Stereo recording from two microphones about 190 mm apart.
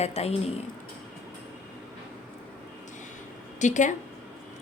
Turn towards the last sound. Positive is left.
turn(degrees=40)  # may be behind; listen again after turning